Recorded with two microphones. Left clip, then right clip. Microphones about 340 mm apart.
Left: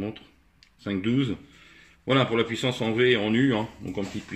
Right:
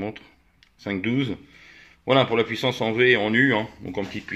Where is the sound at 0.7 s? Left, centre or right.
Centre.